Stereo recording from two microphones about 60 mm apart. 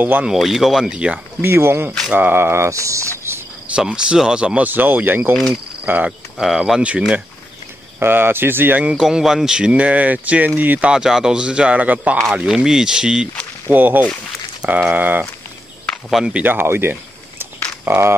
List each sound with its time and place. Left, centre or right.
0.3 s a man's voice: centre
0.9 s a man's voice: centre
1.4 s speech: right
3.8 s a man's voice: centre
4.6 s speech: right
6.4 s a man's voice: centre
6.8 s speech: centre
8.0 s speech: right
9.0 s speech: centre; by 10.9 s right
10.9 s a man's voice: centre
12.3 s a man's voice: centre
13.7 s speech: right
16.1 s a man's voice: centre
16.4 s a sound: right